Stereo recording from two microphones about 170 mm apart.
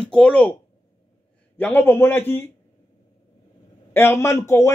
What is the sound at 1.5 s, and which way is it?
Speech, 10° left (ahead or behind).